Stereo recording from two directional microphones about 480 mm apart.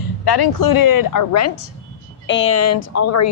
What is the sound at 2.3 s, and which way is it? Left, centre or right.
A woman's voice, left.